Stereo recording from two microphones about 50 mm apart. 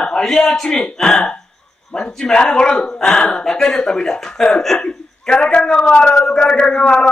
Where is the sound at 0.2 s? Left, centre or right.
Centre.